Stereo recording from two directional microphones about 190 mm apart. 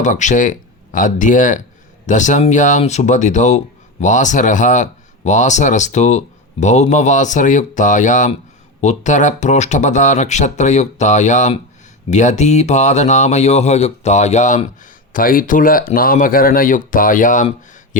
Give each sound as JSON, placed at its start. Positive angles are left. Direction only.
{"t": 0.0, "sound": "speech", "side_deg": 40}